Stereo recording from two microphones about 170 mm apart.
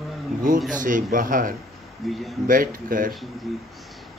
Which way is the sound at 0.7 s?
50° right (ahead or behind).